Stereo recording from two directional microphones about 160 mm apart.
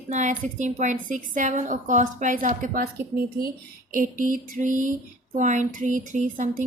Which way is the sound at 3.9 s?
55° right (ahead or behind).